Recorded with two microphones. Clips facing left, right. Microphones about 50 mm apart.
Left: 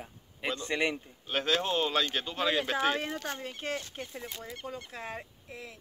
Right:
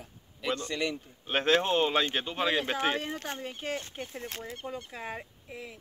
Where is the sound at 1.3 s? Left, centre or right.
Right.